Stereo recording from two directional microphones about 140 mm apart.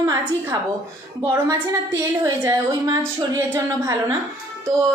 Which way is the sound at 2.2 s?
20° right (ahead or behind).